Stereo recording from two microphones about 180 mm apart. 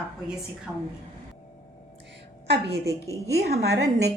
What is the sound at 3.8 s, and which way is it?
Speech, 20° right (ahead or behind).